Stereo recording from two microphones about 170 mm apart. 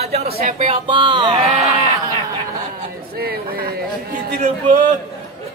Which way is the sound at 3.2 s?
65° right (ahead or behind).